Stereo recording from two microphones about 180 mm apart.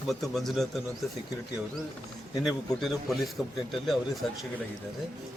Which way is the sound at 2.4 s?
Centre (ahead or behind).